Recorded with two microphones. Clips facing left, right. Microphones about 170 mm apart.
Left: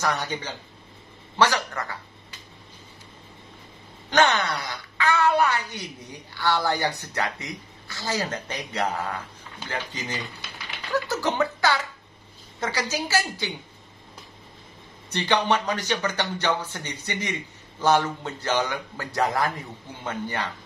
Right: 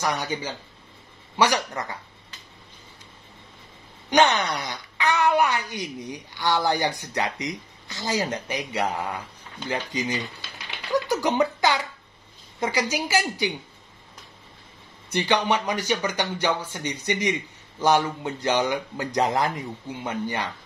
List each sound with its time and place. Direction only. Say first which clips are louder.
0.0 s a woman's voice: even; 10° right (ahead or behind)
4.1 s a woman's voice: right 1 dB; 15° right (ahead or behind)
15.0 s a woman's voice: even; 10° right (ahead or behind)